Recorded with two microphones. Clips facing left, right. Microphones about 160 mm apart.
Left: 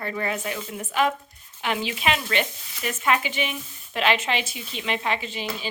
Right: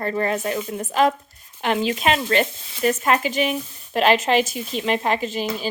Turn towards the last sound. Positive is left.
turn(degrees=-40)  # may be behind; listen again after turning